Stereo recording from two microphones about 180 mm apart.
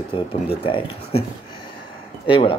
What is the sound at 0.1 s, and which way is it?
Speech, 30° left (ahead or behind).